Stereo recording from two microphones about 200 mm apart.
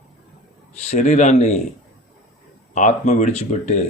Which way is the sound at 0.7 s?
35° left (ahead or behind).